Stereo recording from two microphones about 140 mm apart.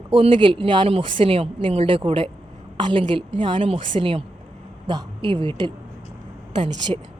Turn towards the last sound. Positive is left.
turn(degrees=-40)  # may be behind; listen again after turning